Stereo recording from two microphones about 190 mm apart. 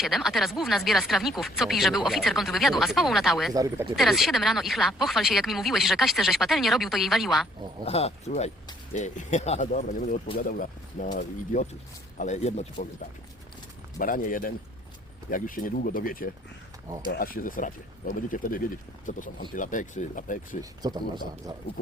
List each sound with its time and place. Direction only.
0.0 s speech: centre (ahead or behind)
3.5 s speech: 20° right (ahead or behind)
3.9 s speech: centre (ahead or behind)
7.9 s speech: 35° left (ahead or behind)
14.0 s speech: 45° left (ahead or behind)
20.6 s speech: 20° right (ahead or behind)